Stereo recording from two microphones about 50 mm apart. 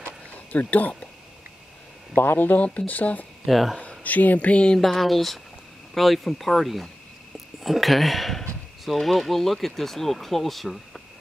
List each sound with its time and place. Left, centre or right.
0.5 s speech: left
2.1 s speech: left
3.4 s speech: centre
4.0 s speech: left
4.7 s speech: centre